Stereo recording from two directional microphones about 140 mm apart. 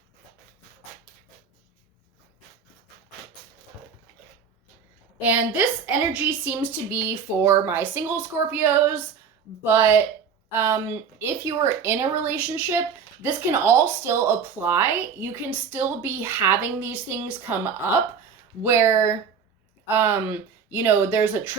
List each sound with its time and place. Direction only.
5.2 s speech: 10° right (ahead or behind)
20.7 s speech: 15° right (ahead or behind)